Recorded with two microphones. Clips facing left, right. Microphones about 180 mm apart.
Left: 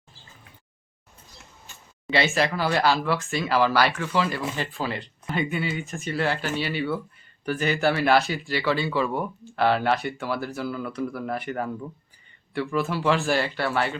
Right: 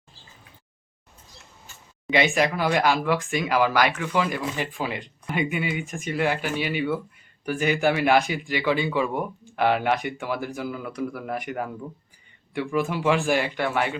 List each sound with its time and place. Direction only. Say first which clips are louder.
2.0 s speech: right 2 dB; 15° right (ahead or behind)